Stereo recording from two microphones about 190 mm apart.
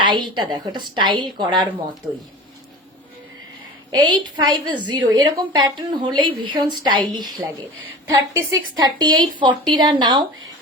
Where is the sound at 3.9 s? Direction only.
20° right (ahead or behind).